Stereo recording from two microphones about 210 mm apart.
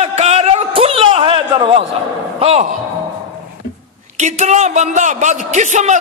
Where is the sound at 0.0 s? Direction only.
30° right (ahead or behind).